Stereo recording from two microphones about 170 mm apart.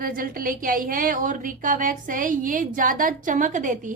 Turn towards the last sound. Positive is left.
turn(degrees=-50)  # may be behind; listen again after turning